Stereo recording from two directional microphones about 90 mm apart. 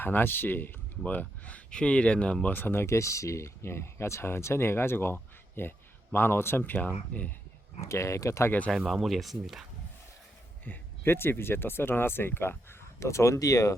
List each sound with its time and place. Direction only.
0.0 s speech: 25° left (ahead or behind)
7.8 s speech: 35° left (ahead or behind)
8.9 s speech: centre (ahead or behind)
10.7 s speech: 25° left (ahead or behind)